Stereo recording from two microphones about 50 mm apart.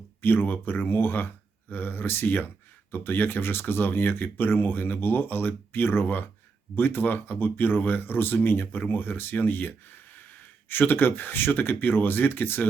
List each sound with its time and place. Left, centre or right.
0.2 s speech: left